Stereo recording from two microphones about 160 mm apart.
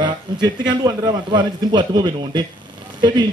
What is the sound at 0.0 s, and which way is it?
Speech, 25° right (ahead or behind).